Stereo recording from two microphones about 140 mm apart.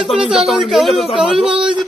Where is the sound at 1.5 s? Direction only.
35° right (ahead or behind).